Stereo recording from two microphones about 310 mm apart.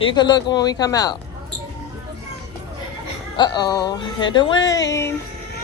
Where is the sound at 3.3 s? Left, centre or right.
Centre.